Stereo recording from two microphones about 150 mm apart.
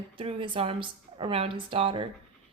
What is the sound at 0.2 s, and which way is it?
A woman's voice, 35° right (ahead or behind).